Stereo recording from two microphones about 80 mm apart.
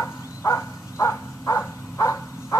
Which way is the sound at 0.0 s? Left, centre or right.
Left.